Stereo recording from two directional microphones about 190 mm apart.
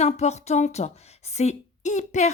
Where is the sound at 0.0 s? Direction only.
35° left (ahead or behind).